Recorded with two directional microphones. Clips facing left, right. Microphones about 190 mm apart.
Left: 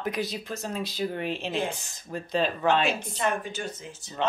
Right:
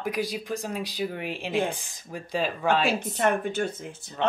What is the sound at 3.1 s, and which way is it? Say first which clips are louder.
A woman's voice: right 4 dB; 60° right (ahead or behind).